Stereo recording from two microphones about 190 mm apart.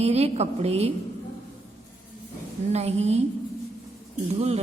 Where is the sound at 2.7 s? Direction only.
35° right (ahead or behind).